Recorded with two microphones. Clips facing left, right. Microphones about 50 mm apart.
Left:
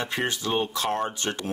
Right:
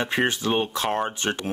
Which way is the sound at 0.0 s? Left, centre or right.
Right.